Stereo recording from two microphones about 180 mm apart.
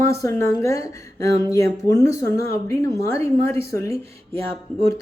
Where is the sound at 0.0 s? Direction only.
15° left (ahead or behind).